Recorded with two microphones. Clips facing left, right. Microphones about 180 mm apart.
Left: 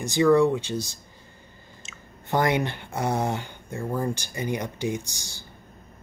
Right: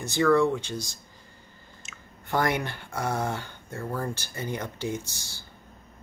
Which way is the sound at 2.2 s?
20° left (ahead or behind).